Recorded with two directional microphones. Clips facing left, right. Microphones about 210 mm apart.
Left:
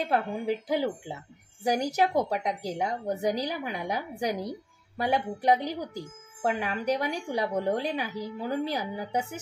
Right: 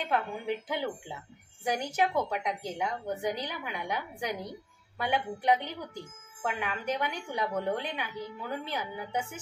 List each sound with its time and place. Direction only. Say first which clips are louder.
0.0 s a woman's voice: left 4 dB; 40° left (ahead or behind)